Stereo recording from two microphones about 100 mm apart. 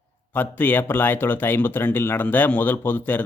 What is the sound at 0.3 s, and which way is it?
Speech, 15° left (ahead or behind).